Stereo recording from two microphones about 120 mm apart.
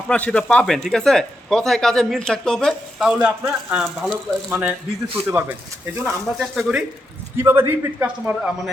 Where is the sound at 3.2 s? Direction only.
10° right (ahead or behind).